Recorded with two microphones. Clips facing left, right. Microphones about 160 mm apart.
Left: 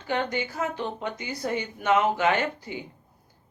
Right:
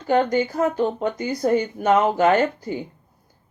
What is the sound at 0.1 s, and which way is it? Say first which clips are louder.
Speech: right 9 dB; 45° right (ahead or behind).